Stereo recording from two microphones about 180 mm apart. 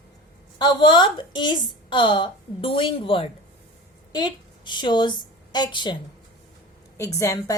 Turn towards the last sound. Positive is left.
turn(degrees=15)  # may be behind; listen again after turning